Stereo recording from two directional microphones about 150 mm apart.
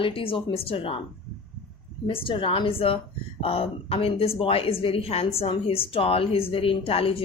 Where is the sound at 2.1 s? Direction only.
40° left (ahead or behind).